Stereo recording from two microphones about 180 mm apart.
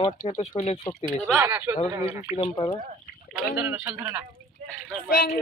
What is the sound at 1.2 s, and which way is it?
Speech, 10° right (ahead or behind).